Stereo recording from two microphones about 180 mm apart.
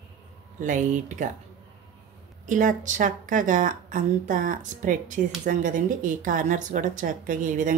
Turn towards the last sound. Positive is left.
turn(degrees=-45)  # may be behind; listen again after turning